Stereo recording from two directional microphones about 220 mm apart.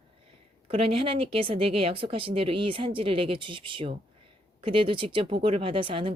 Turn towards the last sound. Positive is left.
turn(degrees=-25)  # may be behind; listen again after turning